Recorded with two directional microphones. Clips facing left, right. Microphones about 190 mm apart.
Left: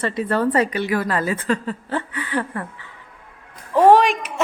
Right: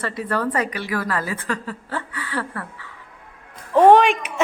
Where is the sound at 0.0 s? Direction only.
25° left (ahead or behind).